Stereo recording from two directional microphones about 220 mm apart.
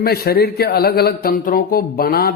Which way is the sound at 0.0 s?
45° left (ahead or behind).